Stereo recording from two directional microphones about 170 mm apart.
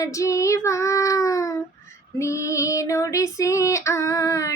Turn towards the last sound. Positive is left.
turn(degrees=20)  # may be behind; listen again after turning